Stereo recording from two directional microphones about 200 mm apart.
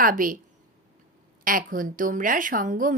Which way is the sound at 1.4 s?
45° right (ahead or behind).